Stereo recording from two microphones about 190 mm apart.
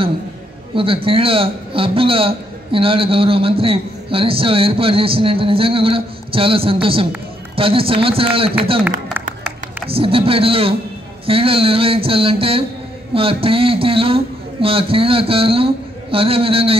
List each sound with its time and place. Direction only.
0.7 s a man's voice: 30° right (ahead or behind)
9.8 s a man's voice: 30° right (ahead or behind)